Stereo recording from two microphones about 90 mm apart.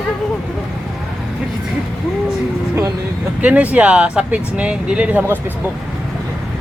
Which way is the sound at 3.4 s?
15° right (ahead or behind).